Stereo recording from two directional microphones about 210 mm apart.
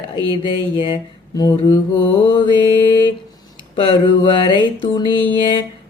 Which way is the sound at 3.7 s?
25° left (ahead or behind).